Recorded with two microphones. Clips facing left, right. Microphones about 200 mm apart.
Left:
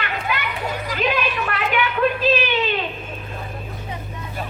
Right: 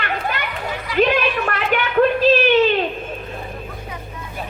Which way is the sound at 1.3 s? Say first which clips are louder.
Right 2 dB; 45° right (ahead or behind).